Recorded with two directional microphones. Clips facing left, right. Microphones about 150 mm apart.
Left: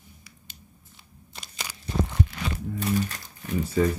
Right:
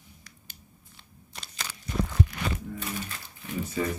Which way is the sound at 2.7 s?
35° left (ahead or behind).